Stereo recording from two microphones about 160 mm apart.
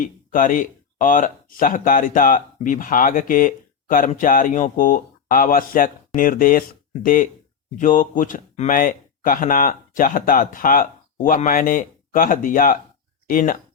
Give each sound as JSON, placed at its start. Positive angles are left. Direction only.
{"t": 0.0, "sound": "speech", "side_deg": 55}